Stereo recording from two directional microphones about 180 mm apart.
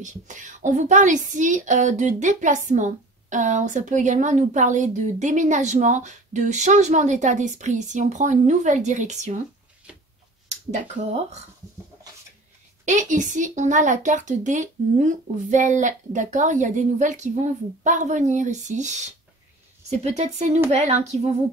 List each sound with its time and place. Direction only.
0.0 s speech: 45° right (ahead or behind)
10.5 s speech: 40° right (ahead or behind)
12.8 s speech: 45° right (ahead or behind)